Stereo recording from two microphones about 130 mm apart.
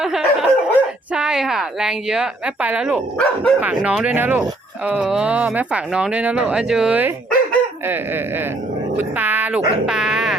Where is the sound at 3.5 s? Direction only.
10° right (ahead or behind).